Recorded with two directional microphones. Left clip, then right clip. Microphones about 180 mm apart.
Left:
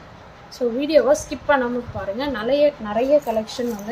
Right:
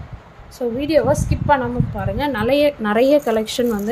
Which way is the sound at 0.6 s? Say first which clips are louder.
Even; 20° right (ahead or behind).